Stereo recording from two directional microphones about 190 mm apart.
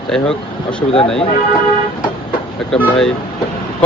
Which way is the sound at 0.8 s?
30° left (ahead or behind).